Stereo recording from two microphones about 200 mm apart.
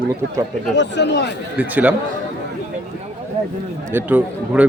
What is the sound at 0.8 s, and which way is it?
Speech, 60° left (ahead or behind).